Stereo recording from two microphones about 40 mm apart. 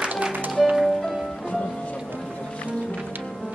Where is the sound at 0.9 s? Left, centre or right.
Centre.